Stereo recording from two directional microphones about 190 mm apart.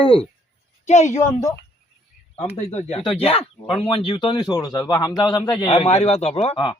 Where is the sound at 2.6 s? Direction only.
35° left (ahead or behind).